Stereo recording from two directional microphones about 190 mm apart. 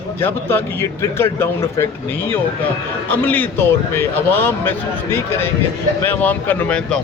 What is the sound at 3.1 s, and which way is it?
A man's voice, 10° left (ahead or behind).